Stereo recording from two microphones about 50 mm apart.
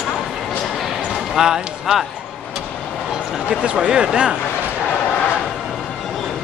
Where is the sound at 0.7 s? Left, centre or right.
Centre.